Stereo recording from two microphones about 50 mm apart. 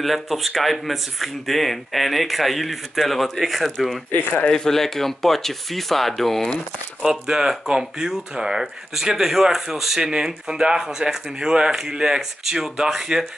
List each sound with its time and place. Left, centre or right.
0.0 s speech: centre
4.1 s speech: left
4.5 s speech: centre
7.0 s speech: centre